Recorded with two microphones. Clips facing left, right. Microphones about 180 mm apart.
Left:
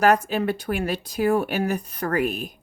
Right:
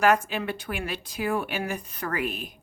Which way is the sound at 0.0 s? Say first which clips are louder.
Left 3 dB; 40° left (ahead or behind).